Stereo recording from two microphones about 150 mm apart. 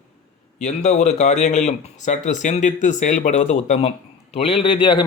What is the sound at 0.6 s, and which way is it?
Speech, 50° left (ahead or behind).